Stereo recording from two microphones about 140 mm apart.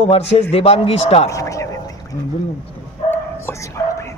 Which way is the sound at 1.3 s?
25° left (ahead or behind).